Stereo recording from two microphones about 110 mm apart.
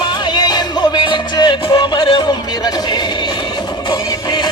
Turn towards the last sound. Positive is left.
turn(degrees=40)  # may be behind; listen again after turning